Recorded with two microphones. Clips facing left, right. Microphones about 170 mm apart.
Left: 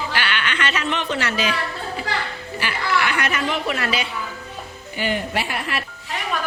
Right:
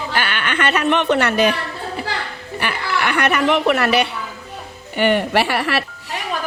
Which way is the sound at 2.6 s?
60° right (ahead or behind).